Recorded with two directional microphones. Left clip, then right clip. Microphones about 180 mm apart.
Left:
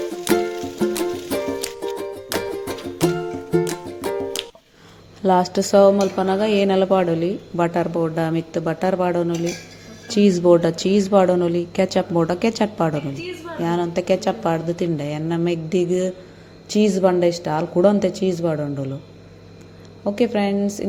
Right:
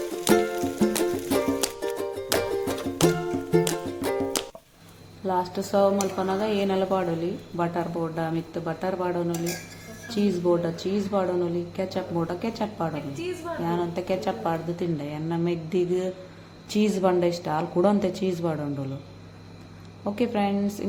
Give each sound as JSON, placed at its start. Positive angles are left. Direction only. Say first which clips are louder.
{"t": 0.0, "sound": "music", "louder": "left 2 dB", "side_deg": 0}
{"t": 5.2, "sound": "speech", "louder": "left 9 dB", "side_deg": 40}
{"t": 13.7, "sound": "a woman's voice", "louder": "left 8 dB", "side_deg": 30}
{"t": 20.1, "sound": "a woman's voice", "louder": "left 6 dB", "side_deg": 20}